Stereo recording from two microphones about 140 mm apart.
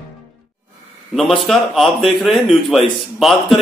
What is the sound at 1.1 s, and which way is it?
A man's voice, centre (ahead or behind).